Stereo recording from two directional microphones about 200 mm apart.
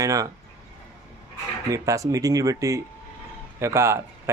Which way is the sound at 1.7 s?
15° right (ahead or behind).